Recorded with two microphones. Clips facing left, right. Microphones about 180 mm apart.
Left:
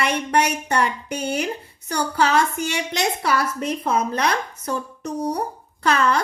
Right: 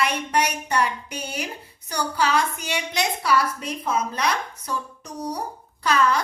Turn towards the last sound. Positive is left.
turn(degrees=55)  # may be behind; listen again after turning